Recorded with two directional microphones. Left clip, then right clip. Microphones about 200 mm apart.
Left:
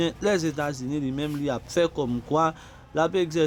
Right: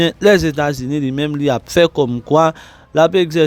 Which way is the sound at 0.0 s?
45° right (ahead or behind).